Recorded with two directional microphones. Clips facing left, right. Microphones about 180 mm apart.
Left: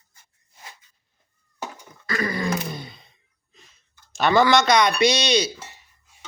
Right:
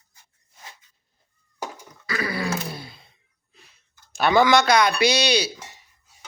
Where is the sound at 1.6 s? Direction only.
10° right (ahead or behind).